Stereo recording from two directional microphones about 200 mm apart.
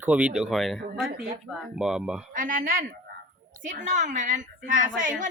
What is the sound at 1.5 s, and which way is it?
Speech, centre (ahead or behind).